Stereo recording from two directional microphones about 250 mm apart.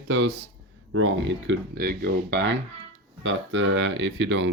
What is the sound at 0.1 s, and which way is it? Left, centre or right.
Speech, right.